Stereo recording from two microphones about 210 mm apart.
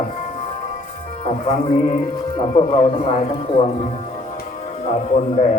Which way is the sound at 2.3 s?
25° left (ahead or behind).